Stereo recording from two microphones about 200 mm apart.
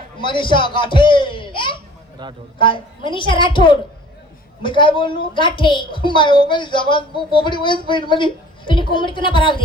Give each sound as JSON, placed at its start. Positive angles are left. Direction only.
{"t": 0.2, "sound": "a woman's voice", "side_deg": 25}
{"t": 2.2, "sound": "a man's voice", "side_deg": -20}
{"t": 2.6, "sound": "a woman's voice", "side_deg": 25}